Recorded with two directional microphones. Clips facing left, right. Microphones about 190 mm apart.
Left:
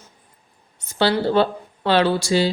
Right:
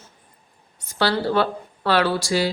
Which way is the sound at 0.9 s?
25° left (ahead or behind).